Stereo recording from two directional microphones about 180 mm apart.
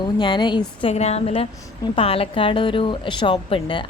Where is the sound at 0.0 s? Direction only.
25° left (ahead or behind).